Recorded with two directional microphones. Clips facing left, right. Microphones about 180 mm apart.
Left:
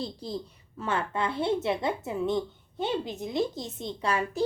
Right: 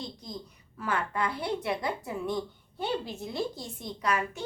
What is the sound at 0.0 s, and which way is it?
A woman's voice, 30° left (ahead or behind).